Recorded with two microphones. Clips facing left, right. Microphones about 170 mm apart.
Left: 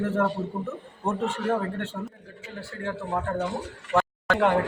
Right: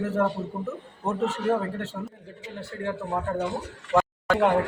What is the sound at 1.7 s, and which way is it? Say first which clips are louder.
Speech: even; centre (ahead or behind).